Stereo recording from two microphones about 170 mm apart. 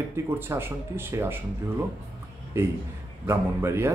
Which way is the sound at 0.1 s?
15° right (ahead or behind).